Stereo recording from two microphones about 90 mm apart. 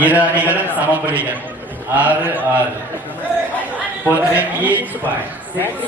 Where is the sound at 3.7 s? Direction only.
15° right (ahead or behind).